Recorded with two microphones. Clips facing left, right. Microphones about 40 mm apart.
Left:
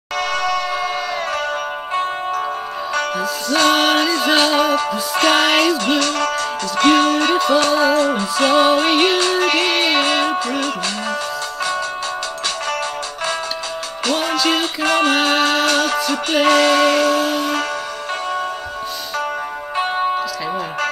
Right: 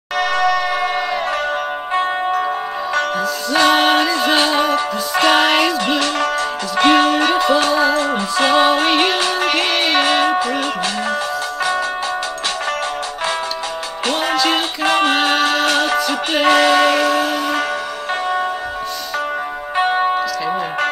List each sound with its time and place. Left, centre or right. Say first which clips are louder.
0.2 s train: right 4 dB; centre
3.4 s music: right 1 dB; centre
5.9 s music: right 1 dB; right
8.0 s music: even; right
14.0 s music: even; right
14.3 s music: right 2 dB; centre
14.8 s music: right 1 dB; centre
15.6 s music: right 1 dB; right